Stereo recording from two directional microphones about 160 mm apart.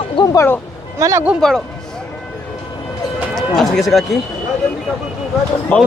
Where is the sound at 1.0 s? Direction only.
20° right (ahead or behind).